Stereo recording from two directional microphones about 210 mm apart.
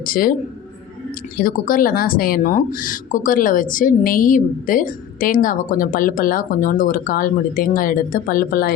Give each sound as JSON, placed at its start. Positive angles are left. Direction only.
{"t": 0.0, "sound": "a woman's voice", "side_deg": 40}
{"t": 1.4, "sound": "speech", "side_deg": 40}